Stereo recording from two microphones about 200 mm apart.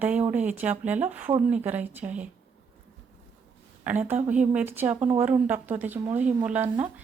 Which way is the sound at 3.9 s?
10° right (ahead or behind).